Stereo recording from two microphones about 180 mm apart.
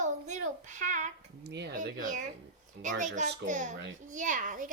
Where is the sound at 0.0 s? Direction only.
40° right (ahead or behind).